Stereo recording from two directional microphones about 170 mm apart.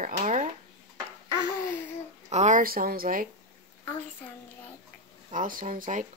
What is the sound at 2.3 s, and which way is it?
Speech, 45° right (ahead or behind).